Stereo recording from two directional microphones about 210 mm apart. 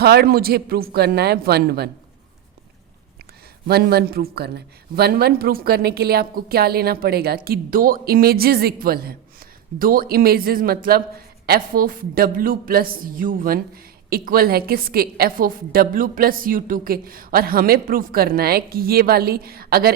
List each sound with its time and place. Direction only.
0.0 s a woman's voice: 50° right (ahead or behind)
3.7 s a woman's voice: 50° right (ahead or behind)